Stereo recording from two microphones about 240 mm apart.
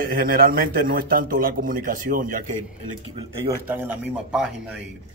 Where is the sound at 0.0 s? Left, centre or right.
Right.